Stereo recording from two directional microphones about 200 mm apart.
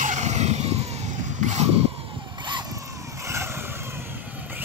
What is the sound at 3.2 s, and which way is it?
Vehicle, 15° right (ahead or behind).